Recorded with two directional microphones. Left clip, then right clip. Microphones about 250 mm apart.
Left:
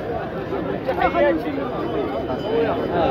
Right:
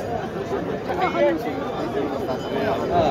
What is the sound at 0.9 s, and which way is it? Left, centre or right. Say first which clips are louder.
Chatter: left 2 dB; left.